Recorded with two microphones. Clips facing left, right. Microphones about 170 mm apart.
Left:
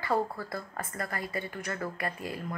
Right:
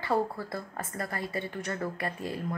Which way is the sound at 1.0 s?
25° right (ahead or behind).